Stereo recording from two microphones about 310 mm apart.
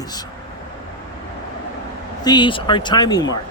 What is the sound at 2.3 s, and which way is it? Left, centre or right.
Speech, centre.